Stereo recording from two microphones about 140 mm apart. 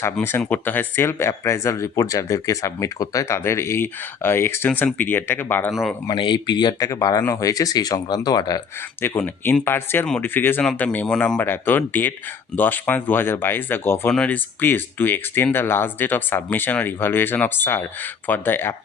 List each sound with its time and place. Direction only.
0.0 s speech: 15° left (ahead or behind)
6.1 s speech: 35° left (ahead or behind)
9.0 s speech: 15° left (ahead or behind)